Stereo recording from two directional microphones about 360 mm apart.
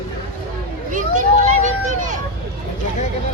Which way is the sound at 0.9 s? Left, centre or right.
Right.